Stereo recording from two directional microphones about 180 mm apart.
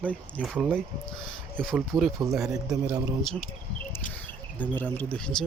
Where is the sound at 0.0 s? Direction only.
10° left (ahead or behind).